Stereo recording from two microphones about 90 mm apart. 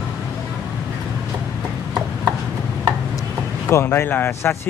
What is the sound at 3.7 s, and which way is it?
Speech, 30° left (ahead or behind).